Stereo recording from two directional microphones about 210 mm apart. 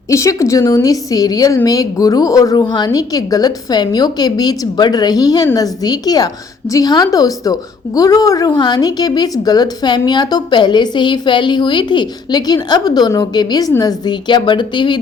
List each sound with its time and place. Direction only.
0.1 s a woman's voice: 15° left (ahead or behind)